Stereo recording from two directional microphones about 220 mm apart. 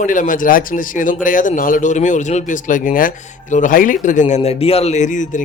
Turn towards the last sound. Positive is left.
turn(degrees=35)  # may be behind; listen again after turning